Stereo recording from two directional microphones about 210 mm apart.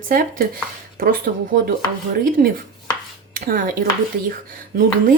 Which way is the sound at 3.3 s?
45° right (ahead or behind).